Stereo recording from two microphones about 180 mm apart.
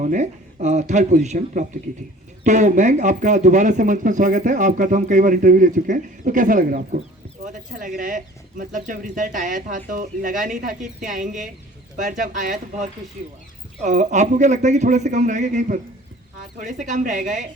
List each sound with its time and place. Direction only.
0.0 s a man's voice: 45° right (ahead or behind)